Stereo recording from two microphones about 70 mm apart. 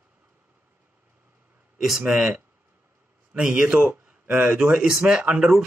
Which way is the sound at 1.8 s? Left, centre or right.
Centre.